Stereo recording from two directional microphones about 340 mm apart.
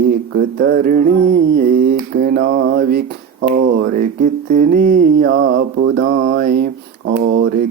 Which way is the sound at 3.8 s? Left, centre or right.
Right.